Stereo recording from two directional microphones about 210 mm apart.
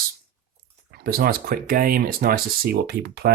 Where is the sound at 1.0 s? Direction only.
45° right (ahead or behind).